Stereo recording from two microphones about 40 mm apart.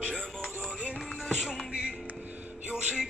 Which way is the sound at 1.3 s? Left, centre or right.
Centre.